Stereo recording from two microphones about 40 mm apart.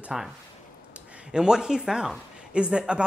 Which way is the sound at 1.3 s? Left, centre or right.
Centre.